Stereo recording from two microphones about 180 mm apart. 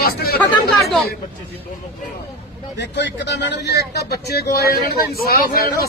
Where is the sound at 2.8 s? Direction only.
75° left (ahead or behind); by 5.8 s 55° left (ahead or behind).